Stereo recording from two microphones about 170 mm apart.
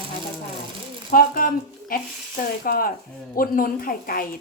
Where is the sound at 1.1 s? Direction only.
55° left (ahead or behind).